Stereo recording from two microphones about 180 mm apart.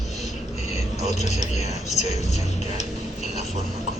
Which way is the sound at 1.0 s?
40° left (ahead or behind).